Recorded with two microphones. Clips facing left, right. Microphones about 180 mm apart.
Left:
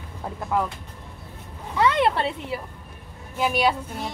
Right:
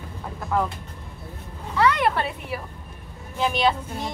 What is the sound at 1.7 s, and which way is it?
Speech, 20° left (ahead or behind).